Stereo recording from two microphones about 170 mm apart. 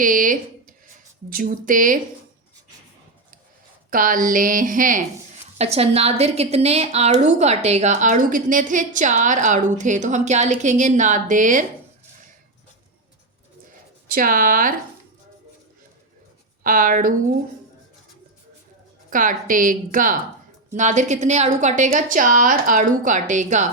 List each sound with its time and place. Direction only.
0.0 s a woman's voice: 50° right (ahead or behind)
3.8 s a woman's voice: 55° right (ahead or behind)
5.5 s a woman's voice: 35° right (ahead or behind)
13.7 s a sound: 55° right (ahead or behind)
16.6 s a woman's voice: 55° right (ahead or behind)
19.1 s a woman's voice: 55° right (ahead or behind)